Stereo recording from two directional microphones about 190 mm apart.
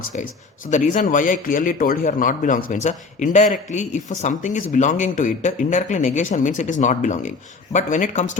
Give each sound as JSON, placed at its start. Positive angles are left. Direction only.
{"t": 0.1, "sound": "speech", "side_deg": 40}